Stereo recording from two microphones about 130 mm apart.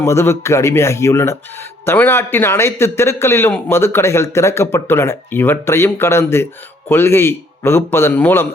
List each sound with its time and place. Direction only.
0.0 s a man's voice: 20° left (ahead or behind)